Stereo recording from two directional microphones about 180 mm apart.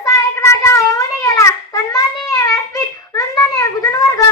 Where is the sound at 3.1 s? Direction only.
15° left (ahead or behind).